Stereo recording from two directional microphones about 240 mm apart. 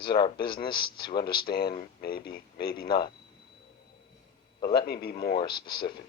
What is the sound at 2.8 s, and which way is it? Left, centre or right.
Speech, centre.